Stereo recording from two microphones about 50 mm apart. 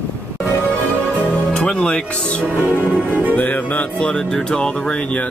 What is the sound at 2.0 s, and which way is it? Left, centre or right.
Speech, left.